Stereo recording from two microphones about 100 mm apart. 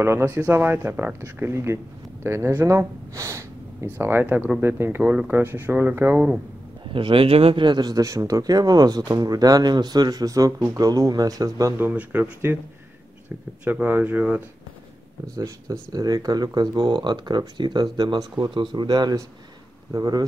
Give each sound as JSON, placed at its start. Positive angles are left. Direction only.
{"t": 0.0, "sound": "speech", "side_deg": -25}
{"t": 6.9, "sound": "speech", "side_deg": -60}
{"t": 7.6, "sound": "speech", "side_deg": -45}
{"t": 11.8, "sound": "speech", "side_deg": -15}
{"t": 13.7, "sound": "speech", "side_deg": -15}
{"t": 15.3, "sound": "speech", "side_deg": -35}